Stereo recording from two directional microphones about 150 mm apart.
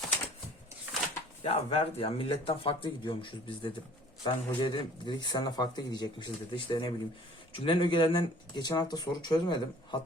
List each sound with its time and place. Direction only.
1.5 s speech: 40° left (ahead or behind)